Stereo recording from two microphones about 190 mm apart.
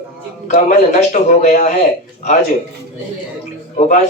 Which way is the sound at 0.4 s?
40° left (ahead or behind).